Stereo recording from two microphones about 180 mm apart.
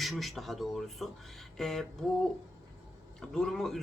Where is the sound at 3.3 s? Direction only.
Centre (ahead or behind).